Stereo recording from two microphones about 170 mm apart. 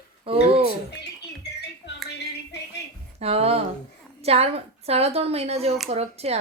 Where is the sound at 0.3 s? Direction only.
30° right (ahead or behind).